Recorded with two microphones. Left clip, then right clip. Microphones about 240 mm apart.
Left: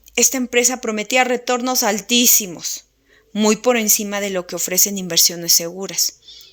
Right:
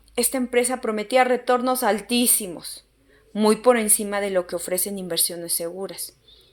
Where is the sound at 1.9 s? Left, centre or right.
Left.